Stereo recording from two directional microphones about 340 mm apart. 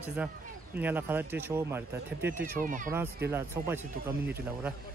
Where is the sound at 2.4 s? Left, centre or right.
Right.